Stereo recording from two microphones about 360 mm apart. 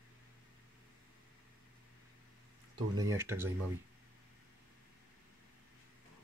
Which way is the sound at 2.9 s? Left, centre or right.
Centre.